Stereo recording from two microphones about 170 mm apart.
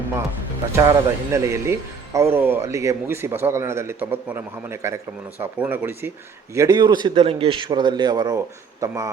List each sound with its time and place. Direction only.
0.8 s a man's voice: 15° right (ahead or behind)